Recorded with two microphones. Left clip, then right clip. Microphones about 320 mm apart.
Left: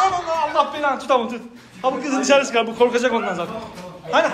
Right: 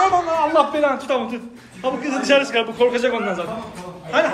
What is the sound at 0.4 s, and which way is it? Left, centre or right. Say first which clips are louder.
A man's voice: right 1 dB; centre.